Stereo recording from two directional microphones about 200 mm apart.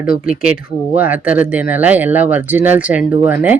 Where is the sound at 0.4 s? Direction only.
5° right (ahead or behind).